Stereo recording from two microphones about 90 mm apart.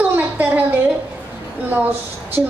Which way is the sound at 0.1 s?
20° right (ahead or behind).